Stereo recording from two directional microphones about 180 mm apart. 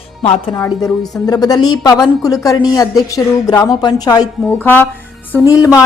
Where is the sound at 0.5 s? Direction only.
20° left (ahead or behind).